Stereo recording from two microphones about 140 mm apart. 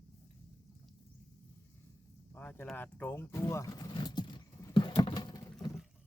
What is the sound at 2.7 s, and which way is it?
Vehicle, 15° left (ahead or behind).